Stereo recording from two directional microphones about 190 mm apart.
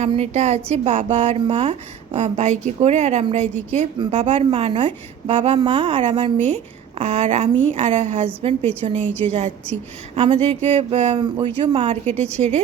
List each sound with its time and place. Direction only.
0.0 s a woman's voice: 35° right (ahead or behind)
9.0 s a woman's voice: 10° left (ahead or behind)
10.2 s a woman's voice: 30° right (ahead or behind)